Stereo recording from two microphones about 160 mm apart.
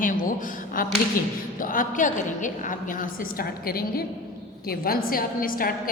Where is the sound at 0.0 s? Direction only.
55° left (ahead or behind).